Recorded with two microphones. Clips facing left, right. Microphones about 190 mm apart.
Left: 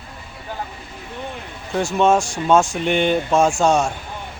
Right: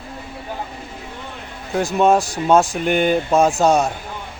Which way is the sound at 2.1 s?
40° right (ahead or behind).